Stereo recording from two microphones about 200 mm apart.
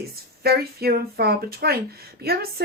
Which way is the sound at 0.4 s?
50° right (ahead or behind).